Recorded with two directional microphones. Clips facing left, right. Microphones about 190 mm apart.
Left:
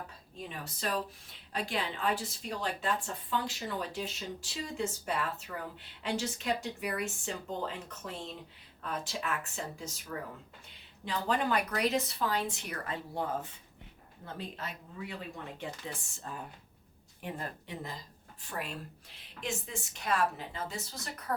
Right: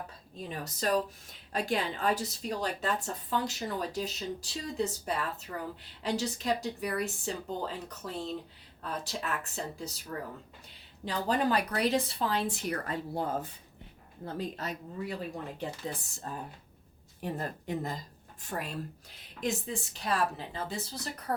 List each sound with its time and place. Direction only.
0.3 s a woman's voice: 40° right (ahead or behind)
19.4 s a woman's voice: 35° right (ahead or behind)